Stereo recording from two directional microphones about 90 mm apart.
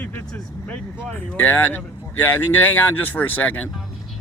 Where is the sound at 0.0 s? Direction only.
20° left (ahead or behind).